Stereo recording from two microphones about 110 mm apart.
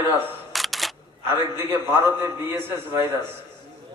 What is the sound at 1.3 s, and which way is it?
A man's voice, 20° right (ahead or behind).